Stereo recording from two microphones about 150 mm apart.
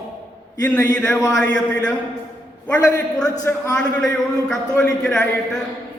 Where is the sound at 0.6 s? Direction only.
10° left (ahead or behind).